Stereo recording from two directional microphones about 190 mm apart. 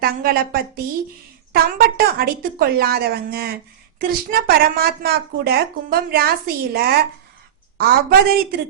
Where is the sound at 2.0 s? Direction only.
50° right (ahead or behind).